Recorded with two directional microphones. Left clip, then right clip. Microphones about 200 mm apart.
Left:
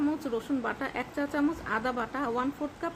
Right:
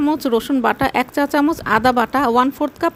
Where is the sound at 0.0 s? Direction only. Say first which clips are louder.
Right 13 dB; 55° right (ahead or behind).